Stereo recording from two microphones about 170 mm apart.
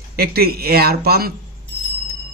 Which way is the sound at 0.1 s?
65° right (ahead or behind).